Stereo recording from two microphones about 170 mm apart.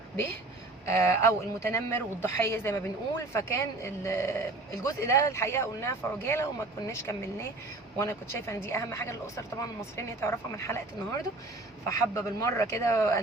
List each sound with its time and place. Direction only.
0.9 s a man's voice: 15° left (ahead or behind)
11.9 s a man's voice: 15° left (ahead or behind)